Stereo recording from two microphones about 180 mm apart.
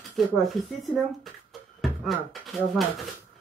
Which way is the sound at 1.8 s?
Centre (ahead or behind).